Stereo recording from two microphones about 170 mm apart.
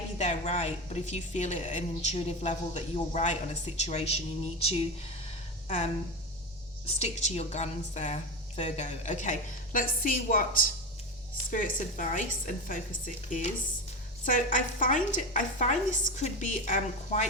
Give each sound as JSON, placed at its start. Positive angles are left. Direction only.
{"t": 0.2, "sound": "a woman's voice", "side_deg": 40}
{"t": 11.5, "sound": "a woman's voice", "side_deg": 50}
{"t": 14.3, "sound": "a woman's voice", "side_deg": 50}